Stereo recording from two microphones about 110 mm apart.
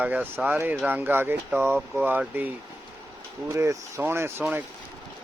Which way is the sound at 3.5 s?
25° right (ahead or behind).